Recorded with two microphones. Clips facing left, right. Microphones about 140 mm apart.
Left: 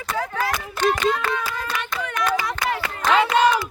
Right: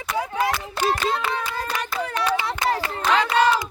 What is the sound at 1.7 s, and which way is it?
Hands, 35° right (ahead or behind).